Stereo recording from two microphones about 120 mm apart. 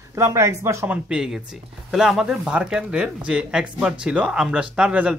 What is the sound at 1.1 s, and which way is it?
Speech, 5° right (ahead or behind).